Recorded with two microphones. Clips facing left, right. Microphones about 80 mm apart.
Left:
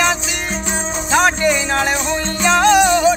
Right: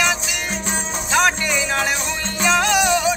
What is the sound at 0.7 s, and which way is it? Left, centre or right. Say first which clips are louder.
Music: left 5 dB; centre.